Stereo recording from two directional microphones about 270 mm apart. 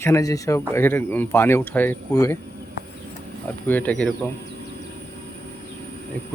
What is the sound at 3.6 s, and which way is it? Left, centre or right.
Speech, centre.